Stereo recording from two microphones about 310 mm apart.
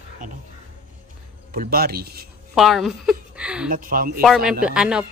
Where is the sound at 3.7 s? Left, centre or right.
Right.